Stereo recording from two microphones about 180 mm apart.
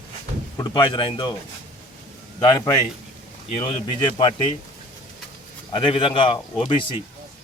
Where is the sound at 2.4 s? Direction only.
25° left (ahead or behind).